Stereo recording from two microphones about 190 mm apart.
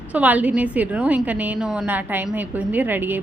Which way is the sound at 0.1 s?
10° right (ahead or behind).